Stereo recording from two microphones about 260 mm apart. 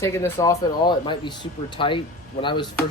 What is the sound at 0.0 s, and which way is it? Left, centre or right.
Speech, centre.